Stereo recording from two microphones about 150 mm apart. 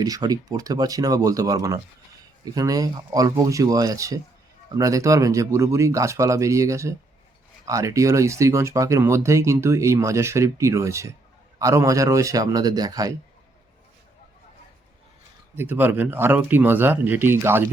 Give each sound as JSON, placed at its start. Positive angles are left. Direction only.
{"t": 0.0, "sound": "speech", "side_deg": -25}
{"t": 15.5, "sound": "speech", "side_deg": -15}